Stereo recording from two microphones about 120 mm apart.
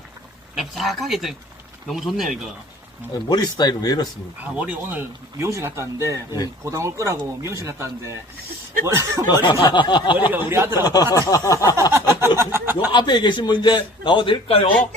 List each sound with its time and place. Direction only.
0.5 s speech: centre (ahead or behind)
3.2 s a man's voice: 35° left (ahead or behind)
4.5 s speech: 15° right (ahead or behind)
9.3 s a man's voice: 35° left (ahead or behind)
10.3 s speech: 20° right (ahead or behind)
10.8 s a sound: 35° left (ahead or behind)
11.9 s a sound: 20° right (ahead or behind)
12.4 s speech: 20° right (ahead or behind)
12.9 s a man's voice: 40° left (ahead or behind)